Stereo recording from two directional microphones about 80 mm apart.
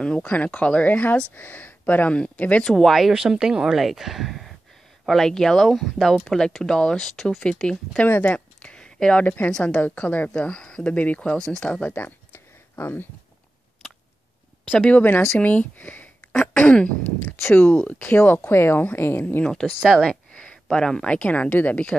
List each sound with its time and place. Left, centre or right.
0.0 s a woman's voice: centre
2.6 s speech: centre
6.2 s a woman's voice: centre
8.1 s a woman's voice: left
11.9 s a sound: left
14.7 s speech: centre
16.3 s a woman's voice: centre
17.5 s speech: left
19.4 s speech: centre
19.9 s a sound: centre
20.7 s a woman's voice: centre